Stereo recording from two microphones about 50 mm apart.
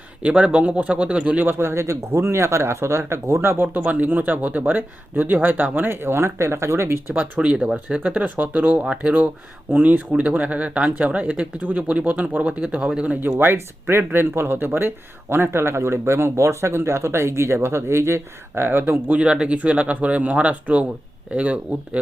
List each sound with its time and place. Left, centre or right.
0.2 s speech: right
1.5 s speech: right
3.6 s speech: right
7.1 s speech: right
7.9 s speech: right
13.1 s speech: right
19.2 s speech: right